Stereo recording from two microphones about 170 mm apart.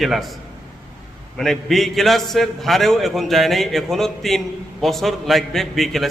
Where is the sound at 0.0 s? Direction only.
Centre (ahead or behind).